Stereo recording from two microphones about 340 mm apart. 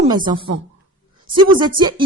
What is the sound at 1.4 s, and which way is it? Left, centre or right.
Speech, centre.